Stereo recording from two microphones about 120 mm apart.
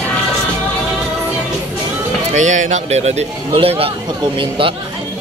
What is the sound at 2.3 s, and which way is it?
Speech, 90° right.